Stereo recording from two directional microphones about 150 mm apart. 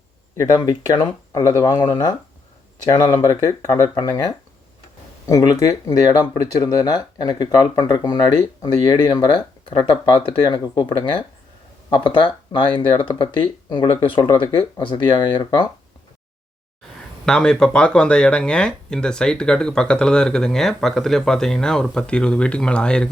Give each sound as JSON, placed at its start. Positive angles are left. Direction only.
{"t": 0.3, "sound": "speech", "side_deg": 25}
{"t": 17.2, "sound": "speech", "side_deg": 5}